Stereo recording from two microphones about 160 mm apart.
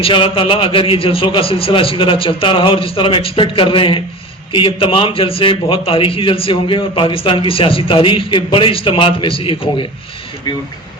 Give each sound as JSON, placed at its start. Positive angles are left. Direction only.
{"t": 0.0, "sound": "a man's voice", "side_deg": 35}